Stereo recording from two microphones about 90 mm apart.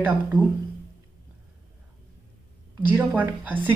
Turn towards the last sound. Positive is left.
turn(degrees=-20)  # may be behind; listen again after turning